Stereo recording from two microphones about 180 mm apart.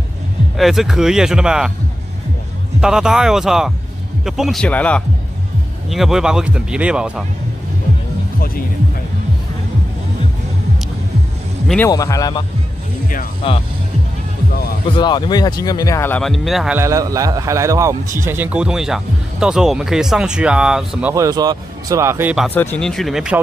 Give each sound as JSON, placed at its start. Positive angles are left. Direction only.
{"t": 0.6, "sound": "speech", "side_deg": 0}
{"t": 2.8, "sound": "speech", "side_deg": -5}
{"t": 11.6, "sound": "speech", "side_deg": 5}
{"t": 11.9, "sound": "speech", "side_deg": 20}
{"t": 13.4, "sound": "speech", "side_deg": 35}
{"t": 15.0, "sound": "speech", "side_deg": 25}
{"t": 16.7, "sound": "speech", "side_deg": -15}
{"t": 21.1, "sound": "speech", "side_deg": -20}
{"t": 22.5, "sound": "speech", "side_deg": 10}